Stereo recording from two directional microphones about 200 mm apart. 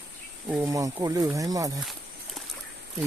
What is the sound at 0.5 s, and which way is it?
Speech, 15° right (ahead or behind).